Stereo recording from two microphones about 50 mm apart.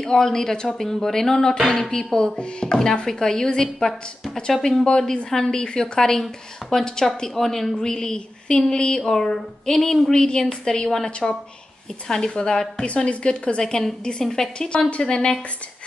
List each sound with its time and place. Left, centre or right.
0.0 s a woman's voice: centre
6.6 s a woman's voice: centre
14.9 s speech: centre